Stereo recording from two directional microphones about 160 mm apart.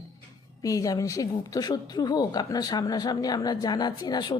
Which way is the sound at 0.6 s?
20° left (ahead or behind).